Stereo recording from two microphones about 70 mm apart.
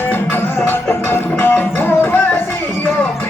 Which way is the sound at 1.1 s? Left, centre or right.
Left.